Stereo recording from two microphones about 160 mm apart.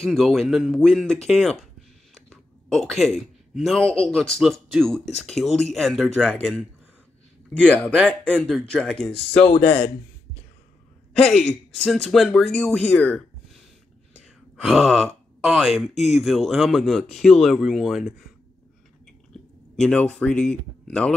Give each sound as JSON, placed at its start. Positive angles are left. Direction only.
{"t": 0.0, "sound": "speech", "side_deg": 0}
{"t": 7.6, "sound": "speech", "side_deg": 10}
{"t": 9.5, "sound": "speech", "side_deg": 40}
{"t": 11.1, "sound": "speech", "side_deg": 0}
{"t": 14.6, "sound": "speech", "side_deg": 0}
{"t": 19.8, "sound": "speech", "side_deg": 5}